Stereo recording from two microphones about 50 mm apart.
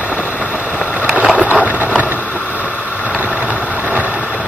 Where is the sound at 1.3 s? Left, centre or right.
Right.